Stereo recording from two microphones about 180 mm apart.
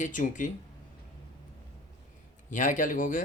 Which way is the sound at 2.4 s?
45° left (ahead or behind).